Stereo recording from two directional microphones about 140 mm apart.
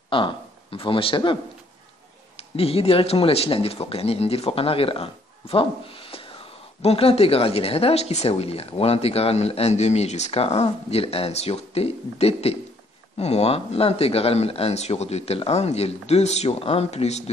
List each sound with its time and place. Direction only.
0.1 s speech: 40° left (ahead or behind)